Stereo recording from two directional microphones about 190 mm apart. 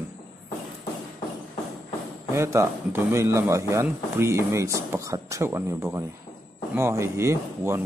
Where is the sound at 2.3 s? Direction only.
15° right (ahead or behind).